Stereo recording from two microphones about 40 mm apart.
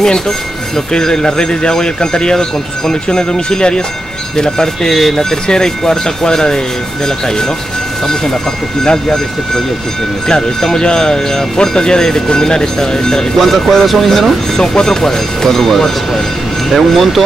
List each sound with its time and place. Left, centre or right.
0.9 s speech: centre
8.8 s speech: centre
13.4 s speech: centre
14.6 s speech: centre